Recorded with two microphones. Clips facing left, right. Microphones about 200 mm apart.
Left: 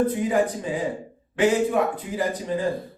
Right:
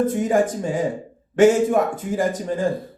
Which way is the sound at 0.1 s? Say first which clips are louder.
Right 3 dB; 45° right (ahead or behind).